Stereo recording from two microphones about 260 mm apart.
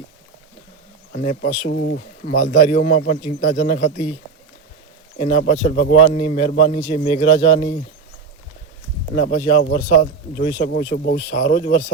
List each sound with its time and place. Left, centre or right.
1.1 s speech: left
1.6 s speech: left
2.2 s a man's voice: left
5.1 s a man's voice: left
9.1 s a man's voice: left